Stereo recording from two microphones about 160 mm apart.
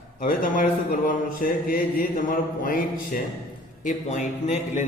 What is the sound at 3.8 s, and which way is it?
A man's voice, 50° left (ahead or behind).